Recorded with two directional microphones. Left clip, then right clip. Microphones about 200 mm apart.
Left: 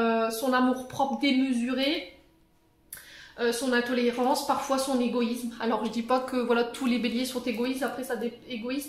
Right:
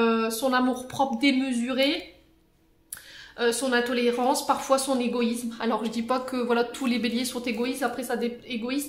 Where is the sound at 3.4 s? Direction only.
25° right (ahead or behind).